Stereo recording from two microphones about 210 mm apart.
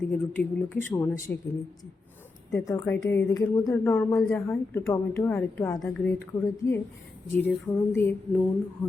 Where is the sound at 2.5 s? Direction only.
15° left (ahead or behind).